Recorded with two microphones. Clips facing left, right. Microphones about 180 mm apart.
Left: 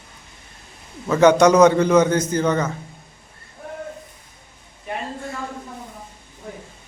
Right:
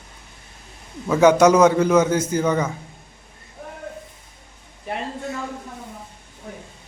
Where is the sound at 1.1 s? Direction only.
5° right (ahead or behind).